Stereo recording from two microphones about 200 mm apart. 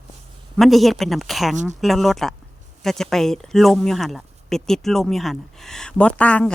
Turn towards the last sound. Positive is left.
turn(degrees=5)  # may be behind; listen again after turning